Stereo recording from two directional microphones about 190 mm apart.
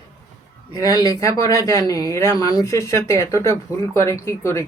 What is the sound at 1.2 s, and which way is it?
Speech, 15° left (ahead or behind).